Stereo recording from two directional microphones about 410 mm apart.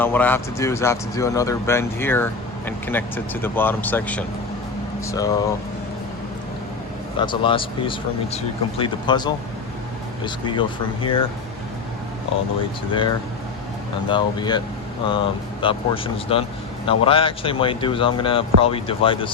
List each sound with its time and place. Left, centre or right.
0.0 s speech: centre
7.2 s speech: centre
12.9 s speech: centre